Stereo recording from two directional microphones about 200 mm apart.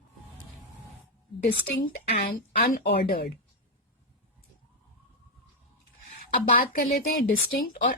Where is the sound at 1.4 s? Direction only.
45° left (ahead or behind).